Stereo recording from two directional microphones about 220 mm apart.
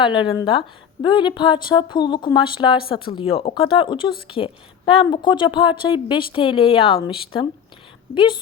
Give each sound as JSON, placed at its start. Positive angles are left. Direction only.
{"t": 0.0, "sound": "a woman's voice", "side_deg": 20}